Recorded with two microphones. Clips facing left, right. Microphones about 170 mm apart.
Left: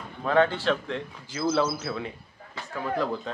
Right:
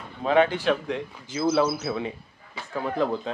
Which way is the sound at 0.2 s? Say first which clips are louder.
Right 2 dB; 15° right (ahead or behind).